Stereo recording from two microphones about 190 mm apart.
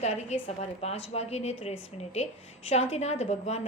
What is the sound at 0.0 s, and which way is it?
A woman's voice, 35° left (ahead or behind).